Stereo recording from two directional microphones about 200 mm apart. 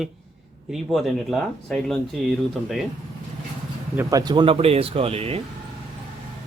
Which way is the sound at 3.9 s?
15° right (ahead or behind).